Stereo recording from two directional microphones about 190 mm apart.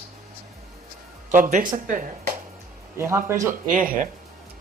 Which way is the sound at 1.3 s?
45° right (ahead or behind).